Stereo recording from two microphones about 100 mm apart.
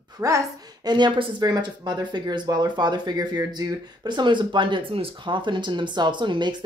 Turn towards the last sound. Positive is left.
turn(degrees=-50)  # may be behind; listen again after turning